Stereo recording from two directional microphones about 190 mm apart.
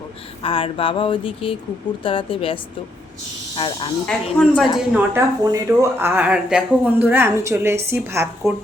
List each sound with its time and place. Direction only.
0.4 s speech: 30° left (ahead or behind)
4.4 s speech: centre (ahead or behind)
4.8 s speech: 10° right (ahead or behind)